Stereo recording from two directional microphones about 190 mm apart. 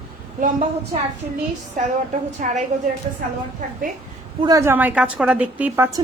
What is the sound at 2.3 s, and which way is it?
Speech, 40° right (ahead or behind).